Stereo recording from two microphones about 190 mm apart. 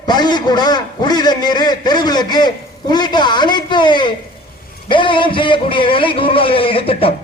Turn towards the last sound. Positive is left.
turn(degrees=30)  # may be behind; listen again after turning